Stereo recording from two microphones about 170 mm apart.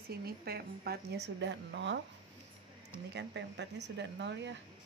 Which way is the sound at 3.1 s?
90° right.